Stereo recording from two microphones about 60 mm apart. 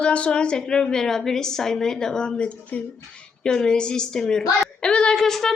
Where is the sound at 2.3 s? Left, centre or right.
Left.